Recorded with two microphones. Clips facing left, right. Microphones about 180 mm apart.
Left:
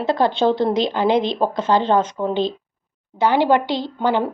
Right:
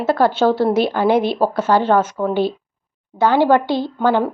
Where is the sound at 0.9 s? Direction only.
15° left (ahead or behind).